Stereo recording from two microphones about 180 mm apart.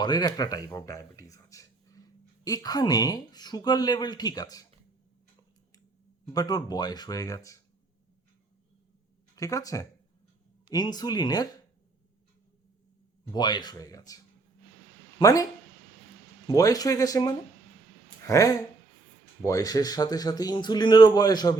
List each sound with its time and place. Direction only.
0.0 s speech: 20° left (ahead or behind)
6.3 s speech: 20° left (ahead or behind)
9.3 s speech: 20° left (ahead or behind)
13.2 s speech: 25° left (ahead or behind)
15.2 s speech: 20° left (ahead or behind)
16.5 s speech: 20° left (ahead or behind)